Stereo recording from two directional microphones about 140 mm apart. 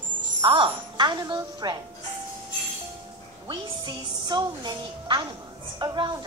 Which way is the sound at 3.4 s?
35° right (ahead or behind).